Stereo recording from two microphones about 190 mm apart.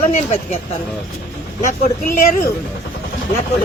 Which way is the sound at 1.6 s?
45° left (ahead or behind).